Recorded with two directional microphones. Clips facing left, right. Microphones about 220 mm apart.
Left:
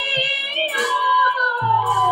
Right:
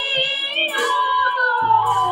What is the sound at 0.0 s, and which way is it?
Music, 15° left (ahead or behind).